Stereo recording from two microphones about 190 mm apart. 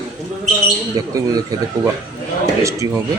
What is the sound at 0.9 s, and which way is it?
Speech, 20° right (ahead or behind).